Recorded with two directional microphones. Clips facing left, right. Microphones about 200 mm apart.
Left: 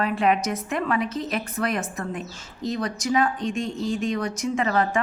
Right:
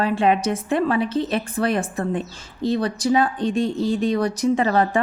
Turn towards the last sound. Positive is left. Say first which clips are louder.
# right 4 dB
turn(degrees=-35)  # may be behind; listen again after turning